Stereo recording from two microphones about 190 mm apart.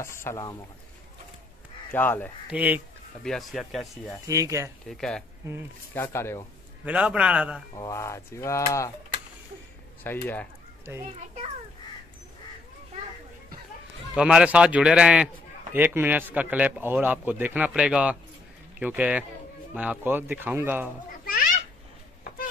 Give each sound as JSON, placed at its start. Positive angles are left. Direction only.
{"t": 0.0, "sound": "speech", "side_deg": 15}
{"t": 1.9, "sound": "speech", "side_deg": 10}
{"t": 2.5, "sound": "a man's voice", "side_deg": -10}
{"t": 4.3, "sound": "a man's voice", "side_deg": -15}
{"t": 4.8, "sound": "a man's voice", "side_deg": 0}
{"t": 5.4, "sound": "a man's voice", "side_deg": -15}
{"t": 5.9, "sound": "speech", "side_deg": 15}
{"t": 6.8, "sound": "a man's voice", "side_deg": -5}
{"t": 7.7, "sound": "speech", "side_deg": 15}
{"t": 10.0, "sound": "speech", "side_deg": 10}
{"t": 10.9, "sound": "a man's voice", "side_deg": -15}
{"t": 14.1, "sound": "a man's voice", "side_deg": -5}